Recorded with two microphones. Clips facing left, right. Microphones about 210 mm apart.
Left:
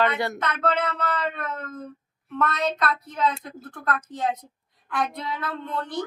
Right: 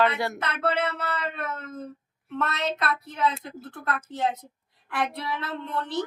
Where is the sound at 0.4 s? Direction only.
30° right (ahead or behind).